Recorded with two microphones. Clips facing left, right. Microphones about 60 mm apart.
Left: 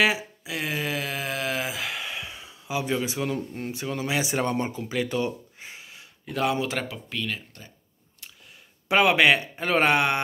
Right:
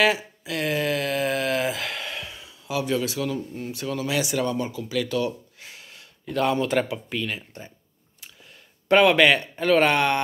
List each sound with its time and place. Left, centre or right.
0.0 s a sound: centre; by 3.8 s left
3.8 s speech: left
5.9 s speech: centre
8.8 s speech: centre